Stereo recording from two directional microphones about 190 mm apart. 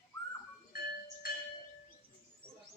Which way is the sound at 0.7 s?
55° left (ahead or behind).